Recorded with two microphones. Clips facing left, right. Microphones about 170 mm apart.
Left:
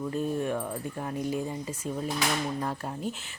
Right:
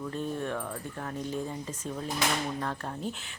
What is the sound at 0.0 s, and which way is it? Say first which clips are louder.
Speech: left 4 dB; 10° left (ahead or behind).